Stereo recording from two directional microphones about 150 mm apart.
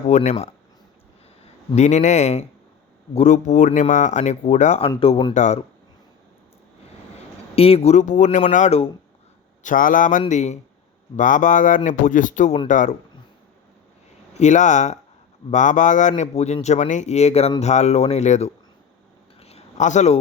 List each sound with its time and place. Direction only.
0.1 s a man's voice: 45° left (ahead or behind)
1.7 s a man's voice: 50° left (ahead or behind)
4.9 s speech: 35° left (ahead or behind)
5.3 s a man's voice: 50° left (ahead or behind)
7.5 s a man's voice: 40° left (ahead or behind)
9.6 s a man's voice: 60° left (ahead or behind)
14.3 s a man's voice: 55° left (ahead or behind)
19.4 s a sound: 45° left (ahead or behind)